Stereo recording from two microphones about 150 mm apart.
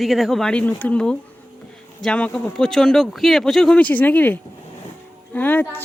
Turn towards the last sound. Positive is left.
turn(degrees=10)  # may be behind; listen again after turning